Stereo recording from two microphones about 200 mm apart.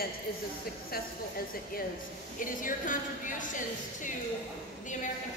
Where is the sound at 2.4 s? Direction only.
40° left (ahead or behind).